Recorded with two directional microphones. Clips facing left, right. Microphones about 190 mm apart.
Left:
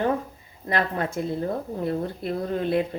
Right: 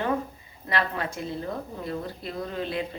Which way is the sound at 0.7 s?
45° left (ahead or behind).